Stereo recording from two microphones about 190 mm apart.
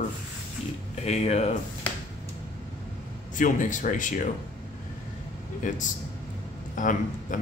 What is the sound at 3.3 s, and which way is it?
Speech, 40° left (ahead or behind).